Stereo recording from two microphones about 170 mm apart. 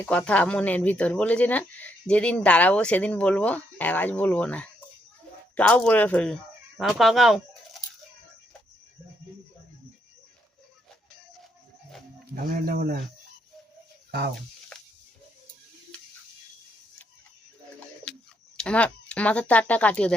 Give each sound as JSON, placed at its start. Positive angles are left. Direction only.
{"t": 0.0, "sound": "speech", "side_deg": 10}
{"t": 12.3, "sound": "speech", "side_deg": -55}
{"t": 18.1, "sound": "a sound", "side_deg": 5}
{"t": 18.5, "sound": "speech", "side_deg": 5}